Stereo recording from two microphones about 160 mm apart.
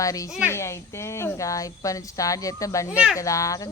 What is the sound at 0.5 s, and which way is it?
Speech, 15° left (ahead or behind).